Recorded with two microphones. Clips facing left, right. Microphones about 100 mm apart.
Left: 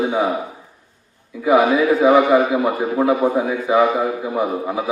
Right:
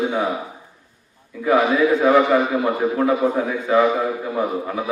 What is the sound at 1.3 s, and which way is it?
A man's voice, 10° left (ahead or behind).